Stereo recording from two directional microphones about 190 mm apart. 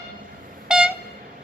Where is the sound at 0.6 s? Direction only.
5° right (ahead or behind).